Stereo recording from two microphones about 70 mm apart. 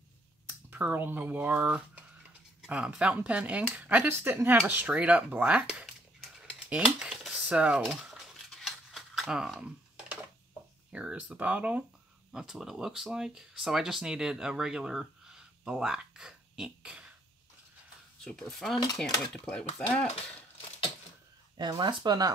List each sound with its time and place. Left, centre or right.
0.5 s speech: right
2.9 s speech: centre
6.3 s typing: centre
10.9 s speech: centre
12.3 s speech: centre
18.2 s speech: centre
21.5 s speech: right